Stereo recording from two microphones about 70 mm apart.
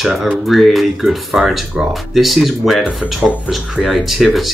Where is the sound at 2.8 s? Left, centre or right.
Centre.